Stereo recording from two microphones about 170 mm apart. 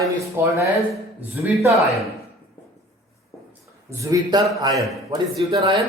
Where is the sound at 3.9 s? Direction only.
20° right (ahead or behind).